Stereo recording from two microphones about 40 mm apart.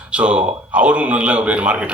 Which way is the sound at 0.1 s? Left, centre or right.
Right.